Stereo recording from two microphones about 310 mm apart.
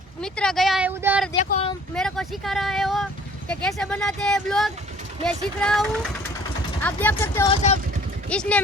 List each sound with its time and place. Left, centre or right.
0.2 s speech: centre
1.5 s speech: left
2.0 s speech: centre
8.3 s speech: centre